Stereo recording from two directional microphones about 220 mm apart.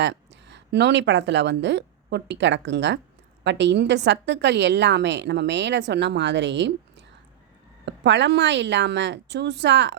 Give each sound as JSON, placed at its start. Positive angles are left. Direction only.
{"t": 0.0, "sound": "a woman's voice", "side_deg": -50}
{"t": 7.9, "sound": "a woman's voice", "side_deg": -55}